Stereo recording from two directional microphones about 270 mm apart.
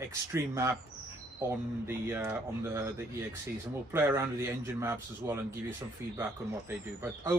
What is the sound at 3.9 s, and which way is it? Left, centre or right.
Speech, centre.